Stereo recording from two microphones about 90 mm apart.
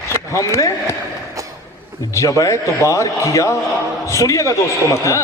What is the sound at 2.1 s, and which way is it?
A man's voice, 35° left (ahead or behind).